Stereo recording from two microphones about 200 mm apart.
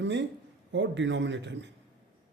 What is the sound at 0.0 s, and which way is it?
Speech, 65° right (ahead or behind).